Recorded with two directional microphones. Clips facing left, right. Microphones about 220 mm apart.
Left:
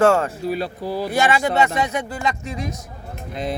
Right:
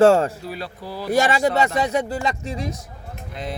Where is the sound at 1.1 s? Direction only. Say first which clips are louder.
Right 2 dB; 40° right (ahead or behind).